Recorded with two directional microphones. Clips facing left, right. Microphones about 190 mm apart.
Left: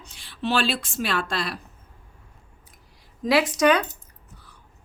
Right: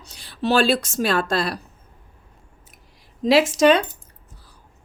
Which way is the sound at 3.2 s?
25° right (ahead or behind).